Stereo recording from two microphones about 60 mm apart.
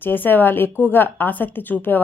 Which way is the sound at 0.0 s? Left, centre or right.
Left.